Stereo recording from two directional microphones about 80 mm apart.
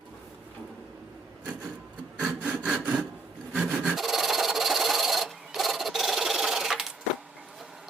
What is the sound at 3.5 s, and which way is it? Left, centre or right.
Rub, centre.